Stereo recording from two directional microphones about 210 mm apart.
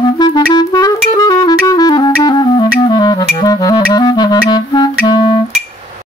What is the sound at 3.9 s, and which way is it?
Clarinet, 20° left (ahead or behind).